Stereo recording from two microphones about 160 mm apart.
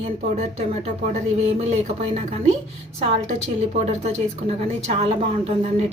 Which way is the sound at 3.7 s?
40° right (ahead or behind).